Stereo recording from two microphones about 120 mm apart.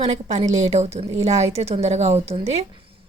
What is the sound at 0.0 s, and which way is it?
A woman's voice, 65° right (ahead or behind).